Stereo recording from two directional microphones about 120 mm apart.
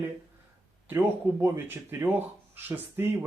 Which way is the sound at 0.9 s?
20° right (ahead or behind).